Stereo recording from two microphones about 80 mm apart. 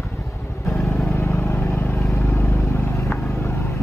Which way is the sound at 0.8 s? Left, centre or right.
Left.